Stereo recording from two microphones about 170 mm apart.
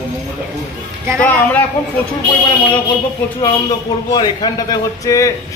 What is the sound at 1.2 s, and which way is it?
Speech, 10° left (ahead or behind).